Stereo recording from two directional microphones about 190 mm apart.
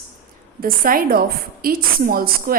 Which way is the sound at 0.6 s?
45° right (ahead or behind).